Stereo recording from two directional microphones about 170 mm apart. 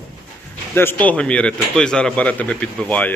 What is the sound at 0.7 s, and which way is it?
A man's voice, 15° left (ahead or behind).